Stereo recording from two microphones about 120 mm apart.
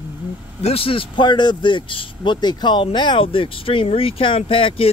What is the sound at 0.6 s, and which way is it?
Speech, 55° left (ahead or behind).